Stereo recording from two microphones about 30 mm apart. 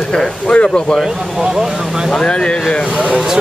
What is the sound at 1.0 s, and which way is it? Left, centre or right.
Speech, centre.